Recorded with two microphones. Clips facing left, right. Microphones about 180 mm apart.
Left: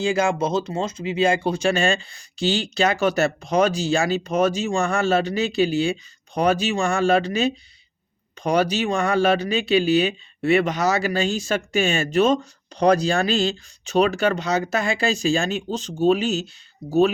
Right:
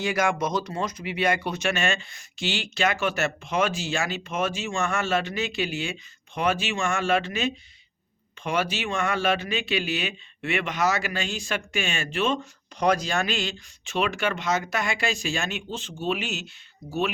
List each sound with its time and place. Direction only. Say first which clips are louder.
0.0 s speech: left 4 dB; 25° left (ahead or behind)